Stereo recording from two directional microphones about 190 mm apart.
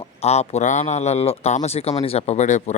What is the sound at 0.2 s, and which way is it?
Speech, 35° left (ahead or behind).